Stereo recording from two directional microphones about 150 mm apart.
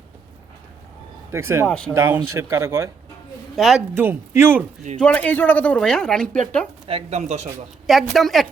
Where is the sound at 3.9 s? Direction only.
15° right (ahead or behind).